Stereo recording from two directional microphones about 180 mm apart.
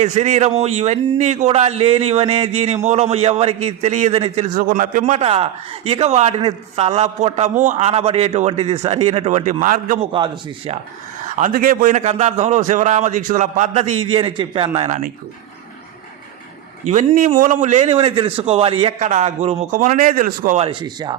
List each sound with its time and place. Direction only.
0.0 s speech: 40° right (ahead or behind)
4.5 s speech: 50° right (ahead or behind)
10.0 s speech: 30° right (ahead or behind)
11.3 s speech: 50° right (ahead or behind)
16.8 s a man's voice: 40° right (ahead or behind)
20.6 s speech: 25° right (ahead or behind)